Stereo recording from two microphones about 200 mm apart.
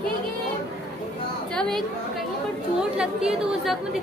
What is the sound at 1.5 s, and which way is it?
Speech, centre (ahead or behind).